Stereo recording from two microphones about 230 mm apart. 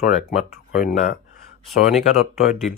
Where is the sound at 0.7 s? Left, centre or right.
Left.